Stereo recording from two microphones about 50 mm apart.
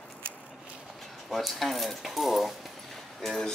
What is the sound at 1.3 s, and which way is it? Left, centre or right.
Speech, centre.